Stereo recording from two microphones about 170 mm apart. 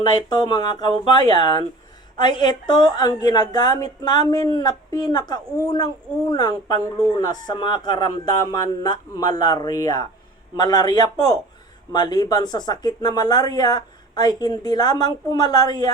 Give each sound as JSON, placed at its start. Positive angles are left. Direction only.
{"t": 0.0, "sound": "speech", "side_deg": 25}